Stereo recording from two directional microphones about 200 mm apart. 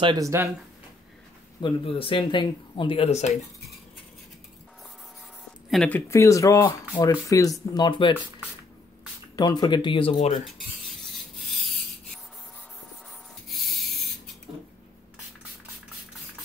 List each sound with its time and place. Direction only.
0.0 s speech: 20° right (ahead or behind)
1.6 s speech: 25° left (ahead or behind)
5.7 s speech: 5° left (ahead or behind); by 8.1 s 20° left (ahead or behind)
9.4 s speech: 20° left (ahead or behind)
11.3 s rub: centre (ahead or behind)
13.5 s a sound: centre (ahead or behind)